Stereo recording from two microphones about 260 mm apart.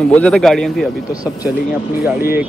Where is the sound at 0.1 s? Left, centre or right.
Centre.